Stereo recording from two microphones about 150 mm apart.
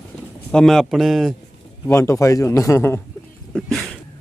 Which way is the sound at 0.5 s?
5° left (ahead or behind).